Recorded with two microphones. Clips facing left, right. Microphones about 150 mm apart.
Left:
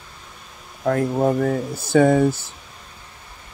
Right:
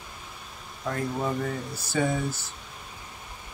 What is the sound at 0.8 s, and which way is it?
Speech, 55° left (ahead or behind).